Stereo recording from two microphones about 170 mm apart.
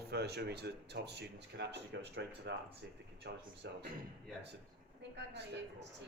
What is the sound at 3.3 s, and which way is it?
Speech, 80° right.